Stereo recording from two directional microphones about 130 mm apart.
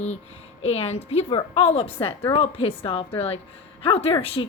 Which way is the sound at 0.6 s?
55° left (ahead or behind).